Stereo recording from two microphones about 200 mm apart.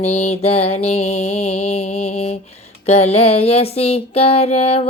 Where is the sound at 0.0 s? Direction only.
35° left (ahead or behind).